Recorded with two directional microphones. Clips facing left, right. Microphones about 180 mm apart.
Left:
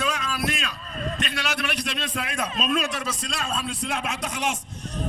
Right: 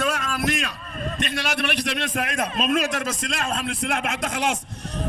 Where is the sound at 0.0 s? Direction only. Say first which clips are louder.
Right 3 dB; 50° right (ahead or behind).